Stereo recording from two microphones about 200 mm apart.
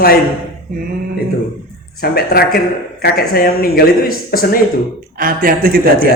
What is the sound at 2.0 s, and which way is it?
Speech, 50° left (ahead or behind).